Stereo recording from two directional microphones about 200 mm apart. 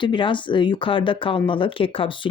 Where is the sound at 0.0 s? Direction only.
25° left (ahead or behind).